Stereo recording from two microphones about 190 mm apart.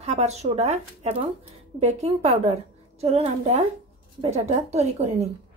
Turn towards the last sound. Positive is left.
turn(degrees=-35)  # may be behind; listen again after turning